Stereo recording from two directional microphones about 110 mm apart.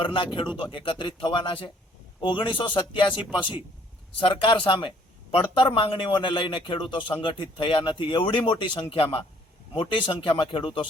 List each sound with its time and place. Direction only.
0.3 s speech: 50° left (ahead or behind)
3.2 s speech: 10° right (ahead or behind)
4.2 s speech: 50° left (ahead or behind)